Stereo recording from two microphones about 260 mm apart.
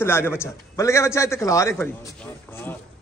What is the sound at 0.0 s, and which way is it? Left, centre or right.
A man's voice, centre.